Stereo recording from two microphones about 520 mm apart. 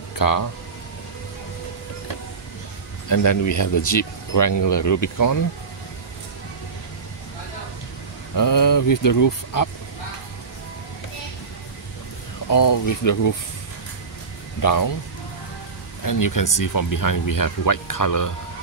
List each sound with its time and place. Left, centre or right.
0.2 s speech: left
3.1 s speech: left
8.4 s speech: left
12.4 s speech: left
14.6 s speech: left
16.0 s speech: left